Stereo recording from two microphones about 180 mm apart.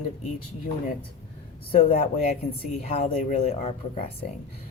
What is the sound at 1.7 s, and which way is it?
Speech, 35° left (ahead or behind).